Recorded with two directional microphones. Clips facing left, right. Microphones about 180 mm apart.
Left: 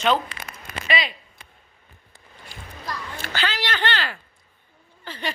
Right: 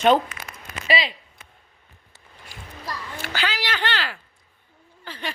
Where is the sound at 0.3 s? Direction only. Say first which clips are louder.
Even; 30° left (ahead or behind).